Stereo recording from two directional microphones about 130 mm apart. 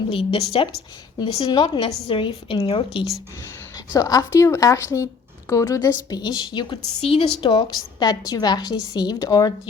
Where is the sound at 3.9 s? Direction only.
30° left (ahead or behind).